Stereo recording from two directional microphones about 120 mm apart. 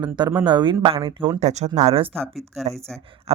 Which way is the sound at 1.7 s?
55° right (ahead or behind).